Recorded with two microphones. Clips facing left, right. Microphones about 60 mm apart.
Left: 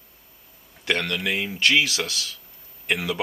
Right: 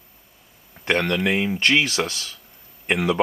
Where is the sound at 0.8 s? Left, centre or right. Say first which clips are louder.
Right 4 dB; right.